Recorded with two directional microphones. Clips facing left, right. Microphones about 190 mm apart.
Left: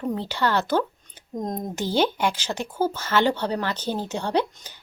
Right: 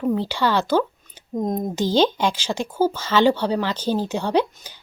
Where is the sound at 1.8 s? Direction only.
90° right.